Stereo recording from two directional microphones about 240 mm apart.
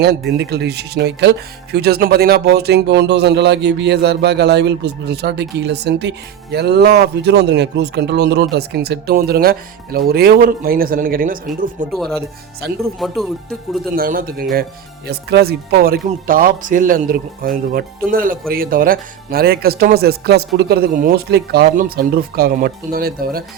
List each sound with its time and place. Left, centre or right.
0.0 s speech: right
11.9 s speech: centre
13.9 s speech: right